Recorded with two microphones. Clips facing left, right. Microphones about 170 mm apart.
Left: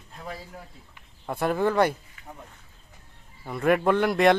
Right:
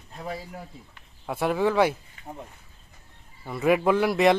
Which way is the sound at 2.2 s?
30° right (ahead or behind).